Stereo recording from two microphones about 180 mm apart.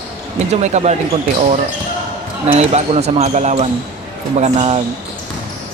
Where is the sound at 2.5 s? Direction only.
35° right (ahead or behind).